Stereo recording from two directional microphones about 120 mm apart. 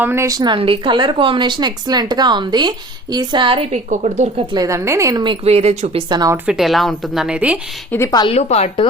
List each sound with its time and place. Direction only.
0.0 s a woman's voice: 20° right (ahead or behind)
0.3 s speech: 35° right (ahead or behind)
3.7 s a woman's voice: 85° right
4.5 s a woman's voice: 25° right (ahead or behind)
5.5 s speech: 60° right (ahead or behind)
6.1 s speech: 35° right (ahead or behind)
6.3 s speech: 10° right (ahead or behind)
7.9 s a woman's voice: 15° left (ahead or behind)
8.3 s a woman's voice: 60° left (ahead or behind)